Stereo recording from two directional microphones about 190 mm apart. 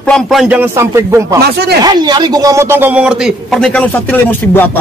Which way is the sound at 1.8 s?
20° right (ahead or behind).